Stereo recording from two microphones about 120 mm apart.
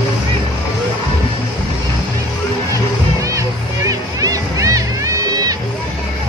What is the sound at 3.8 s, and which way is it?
Music, 30° right (ahead or behind).